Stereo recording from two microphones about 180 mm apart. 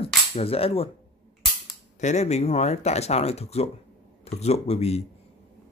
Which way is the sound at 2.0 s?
40° left (ahead or behind).